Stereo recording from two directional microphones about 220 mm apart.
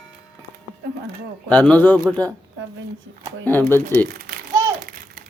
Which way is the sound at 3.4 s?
10° left (ahead or behind).